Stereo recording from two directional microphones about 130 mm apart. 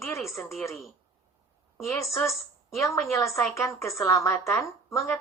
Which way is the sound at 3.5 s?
20° left (ahead or behind).